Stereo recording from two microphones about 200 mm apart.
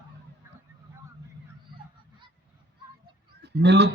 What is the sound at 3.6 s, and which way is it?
Speech, 60° right (ahead or behind).